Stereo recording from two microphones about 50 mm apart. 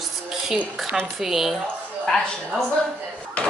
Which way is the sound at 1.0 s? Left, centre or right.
Centre.